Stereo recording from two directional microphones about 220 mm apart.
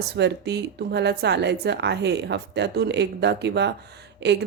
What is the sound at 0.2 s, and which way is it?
Speech, 50° right (ahead or behind).